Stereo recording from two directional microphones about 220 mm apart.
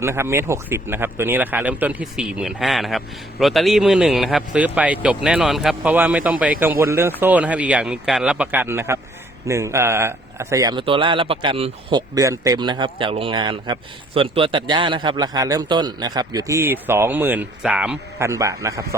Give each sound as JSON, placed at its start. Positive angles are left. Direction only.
{"t": 0.0, "sound": "a man's voice", "side_deg": -10}